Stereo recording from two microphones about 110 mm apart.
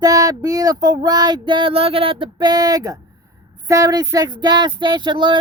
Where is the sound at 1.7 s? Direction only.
60° right (ahead or behind).